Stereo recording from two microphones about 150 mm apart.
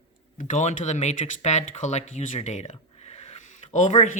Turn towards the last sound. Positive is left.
turn(degrees=55)  # may be behind; listen again after turning